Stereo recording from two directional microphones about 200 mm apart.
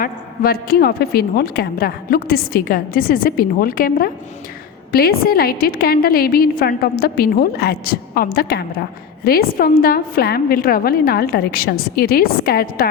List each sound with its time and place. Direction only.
0.0 s a woman's voice: 50° left (ahead or behind)